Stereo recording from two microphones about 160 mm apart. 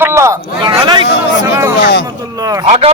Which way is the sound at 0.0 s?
15° right (ahead or behind).